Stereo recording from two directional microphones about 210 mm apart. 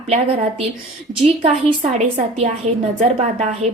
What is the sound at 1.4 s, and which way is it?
A woman's voice, 30° right (ahead or behind).